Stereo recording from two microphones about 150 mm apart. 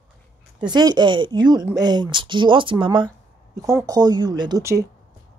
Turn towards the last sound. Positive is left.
turn(degrees=-25)  # may be behind; listen again after turning